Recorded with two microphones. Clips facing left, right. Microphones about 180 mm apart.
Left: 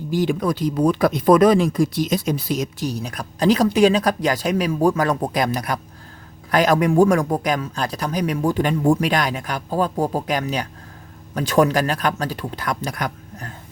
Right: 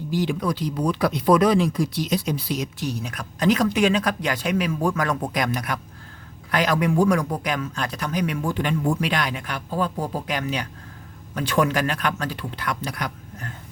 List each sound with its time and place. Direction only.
0.1 s speech: 45° left (ahead or behind)